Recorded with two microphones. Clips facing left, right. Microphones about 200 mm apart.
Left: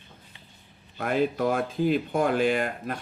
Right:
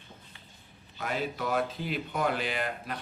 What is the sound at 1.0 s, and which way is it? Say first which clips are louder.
Speech: left 8 dB; 50° left (ahead or behind).